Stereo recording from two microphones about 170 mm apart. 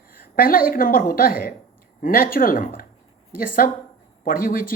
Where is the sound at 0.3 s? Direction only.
55° left (ahead or behind).